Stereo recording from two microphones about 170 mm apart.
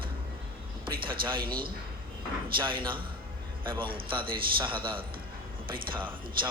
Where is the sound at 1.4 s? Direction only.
60° right (ahead or behind).